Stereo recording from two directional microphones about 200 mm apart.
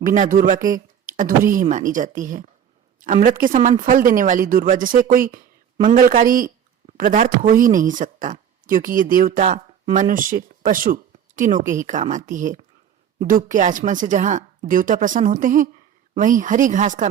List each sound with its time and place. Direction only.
0.0 s a woman's voice: 40° right (ahead or behind)